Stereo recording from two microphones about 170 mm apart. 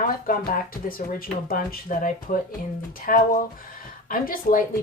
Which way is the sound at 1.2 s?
55° left (ahead or behind).